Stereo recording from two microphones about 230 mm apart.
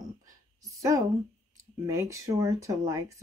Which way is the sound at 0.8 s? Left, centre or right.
Centre.